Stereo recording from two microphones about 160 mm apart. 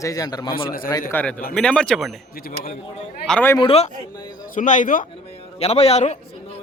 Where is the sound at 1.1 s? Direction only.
10° left (ahead or behind).